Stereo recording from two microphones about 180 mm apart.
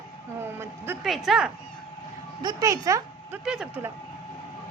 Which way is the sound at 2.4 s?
20° right (ahead or behind).